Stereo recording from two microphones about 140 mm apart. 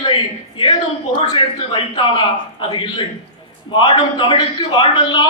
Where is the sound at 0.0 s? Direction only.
35° left (ahead or behind).